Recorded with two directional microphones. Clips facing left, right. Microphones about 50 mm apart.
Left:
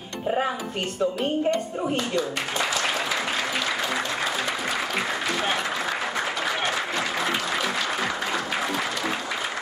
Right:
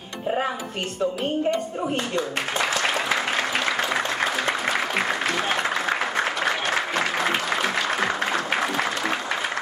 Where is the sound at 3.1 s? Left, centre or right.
Right.